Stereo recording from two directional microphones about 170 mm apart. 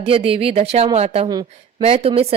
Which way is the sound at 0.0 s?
35° right (ahead or behind).